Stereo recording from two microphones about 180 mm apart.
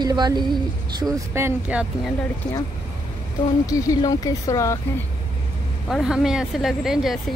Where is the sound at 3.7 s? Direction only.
20° left (ahead or behind).